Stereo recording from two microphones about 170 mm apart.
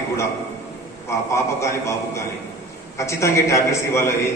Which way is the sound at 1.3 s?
15° left (ahead or behind).